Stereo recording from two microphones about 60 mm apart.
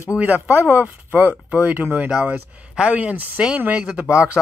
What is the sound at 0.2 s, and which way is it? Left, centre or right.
A man's voice, right.